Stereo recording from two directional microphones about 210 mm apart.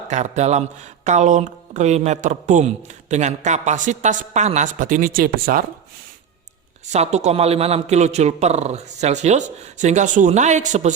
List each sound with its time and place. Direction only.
0.1 s speech: 35° right (ahead or behind)
6.9 s speech: 30° right (ahead or behind)